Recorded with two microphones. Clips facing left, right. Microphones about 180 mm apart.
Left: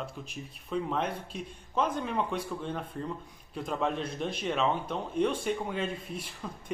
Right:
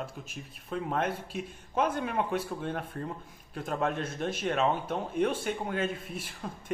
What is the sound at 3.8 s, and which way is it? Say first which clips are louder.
Speech: right 1 dB; centre (ahead or behind).